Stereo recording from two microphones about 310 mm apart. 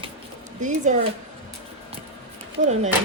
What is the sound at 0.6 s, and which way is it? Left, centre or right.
Speech, right.